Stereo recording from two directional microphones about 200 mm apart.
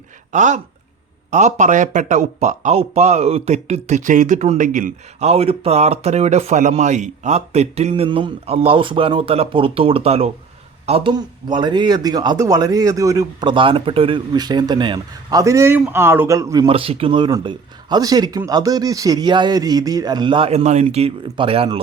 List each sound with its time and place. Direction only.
0.3 s a man's voice: 35° right (ahead or behind)